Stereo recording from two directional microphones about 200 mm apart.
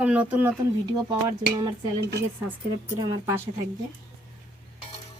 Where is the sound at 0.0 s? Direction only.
5° right (ahead or behind).